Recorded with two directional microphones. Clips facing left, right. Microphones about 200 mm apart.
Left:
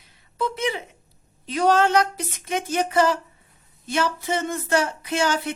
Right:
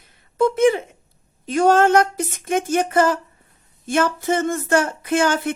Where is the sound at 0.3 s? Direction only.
50° right (ahead or behind).